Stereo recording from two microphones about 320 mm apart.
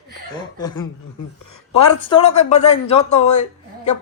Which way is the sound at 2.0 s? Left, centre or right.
Centre.